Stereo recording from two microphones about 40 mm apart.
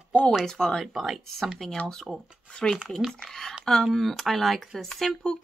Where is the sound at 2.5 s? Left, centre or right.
Left.